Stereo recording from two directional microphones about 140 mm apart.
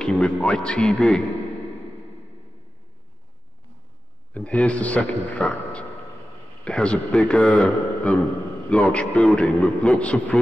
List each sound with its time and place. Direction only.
0.0 s speech: 5° left (ahead or behind)
4.3 s a man's voice: 10° left (ahead or behind)